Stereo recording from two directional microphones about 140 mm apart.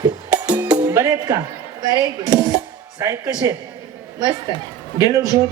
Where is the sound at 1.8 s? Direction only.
25° right (ahead or behind).